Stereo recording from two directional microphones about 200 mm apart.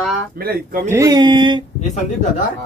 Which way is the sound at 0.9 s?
15° right (ahead or behind).